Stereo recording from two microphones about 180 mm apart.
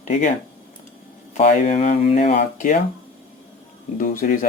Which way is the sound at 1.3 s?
40° left (ahead or behind).